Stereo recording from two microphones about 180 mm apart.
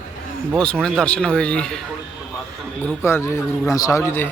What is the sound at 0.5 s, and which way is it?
Speech, 5° left (ahead or behind).